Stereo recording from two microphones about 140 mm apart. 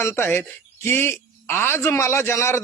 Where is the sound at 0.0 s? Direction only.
15° left (ahead or behind).